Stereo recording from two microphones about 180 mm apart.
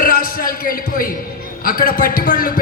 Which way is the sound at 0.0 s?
55° left (ahead or behind).